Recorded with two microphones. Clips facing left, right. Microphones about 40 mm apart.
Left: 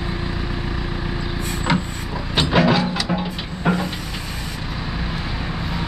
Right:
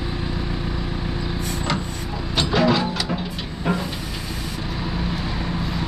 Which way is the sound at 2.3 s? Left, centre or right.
Centre.